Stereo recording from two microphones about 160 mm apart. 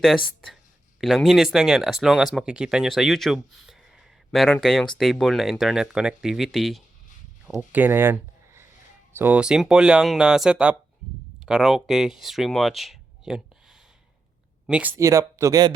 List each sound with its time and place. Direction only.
1.0 s speech: centre (ahead or behind); by 15.7 s 20° right (ahead or behind)